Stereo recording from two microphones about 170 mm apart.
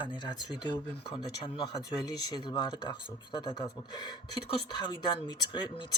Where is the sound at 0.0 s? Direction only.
25° left (ahead or behind).